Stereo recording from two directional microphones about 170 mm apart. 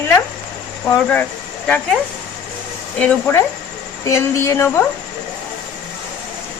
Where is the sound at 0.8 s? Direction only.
5° left (ahead or behind).